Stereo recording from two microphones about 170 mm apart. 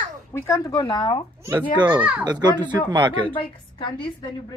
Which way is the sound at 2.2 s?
25° right (ahead or behind).